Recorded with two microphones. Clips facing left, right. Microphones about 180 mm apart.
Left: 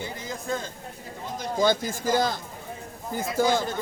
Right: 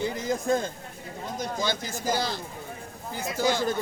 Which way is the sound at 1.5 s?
50° left (ahead or behind).